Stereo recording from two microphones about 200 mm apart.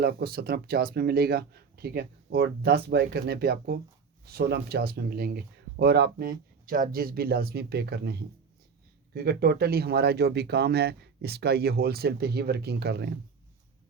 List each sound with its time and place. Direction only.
0.0 s speech: 50° right (ahead or behind)